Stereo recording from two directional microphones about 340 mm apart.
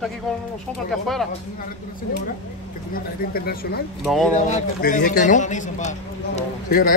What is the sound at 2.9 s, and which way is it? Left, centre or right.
A man's voice, left.